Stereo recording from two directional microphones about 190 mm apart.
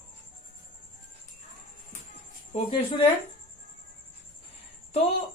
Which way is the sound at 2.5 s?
35° left (ahead or behind).